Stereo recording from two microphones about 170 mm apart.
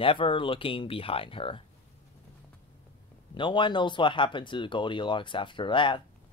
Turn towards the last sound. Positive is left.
turn(degrees=30)  # may be behind; listen again after turning